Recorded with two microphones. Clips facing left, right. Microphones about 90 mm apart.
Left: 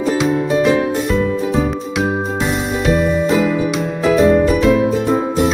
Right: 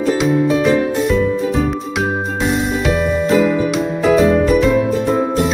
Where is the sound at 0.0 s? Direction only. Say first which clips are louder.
Right 1 dB; centre (ahead or behind).